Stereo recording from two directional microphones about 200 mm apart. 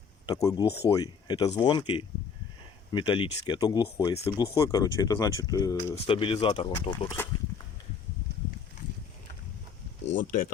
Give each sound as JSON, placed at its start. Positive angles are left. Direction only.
{"t": 0.3, "sound": "speech", "side_deg": 20}
{"t": 6.1, "sound": "speech", "side_deg": 25}
{"t": 10.2, "sound": "speech", "side_deg": 45}